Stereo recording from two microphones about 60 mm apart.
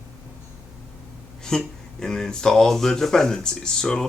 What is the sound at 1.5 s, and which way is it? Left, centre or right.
Speech, centre.